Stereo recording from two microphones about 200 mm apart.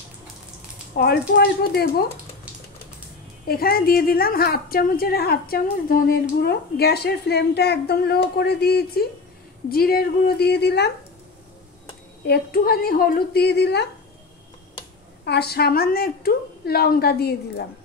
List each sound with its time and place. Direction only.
0.9 s a woman's voice: 55° left (ahead or behind)
3.4 s a woman's voice: 50° left (ahead or behind)
12.3 s a woman's voice: 50° left (ahead or behind)
15.2 s a woman's voice: 55° left (ahead or behind)